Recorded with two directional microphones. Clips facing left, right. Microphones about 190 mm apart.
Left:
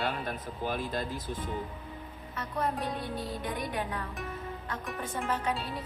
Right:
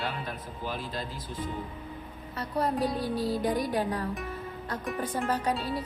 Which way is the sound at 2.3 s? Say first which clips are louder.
Right 4 dB; 35° right (ahead or behind).